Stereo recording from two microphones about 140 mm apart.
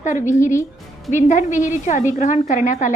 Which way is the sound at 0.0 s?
65° left (ahead or behind).